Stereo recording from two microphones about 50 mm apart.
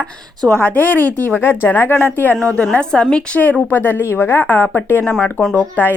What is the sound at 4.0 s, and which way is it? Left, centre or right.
Speech, left.